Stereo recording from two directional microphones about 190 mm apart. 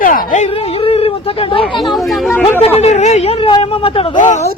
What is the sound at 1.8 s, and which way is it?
Speech, centre (ahead or behind).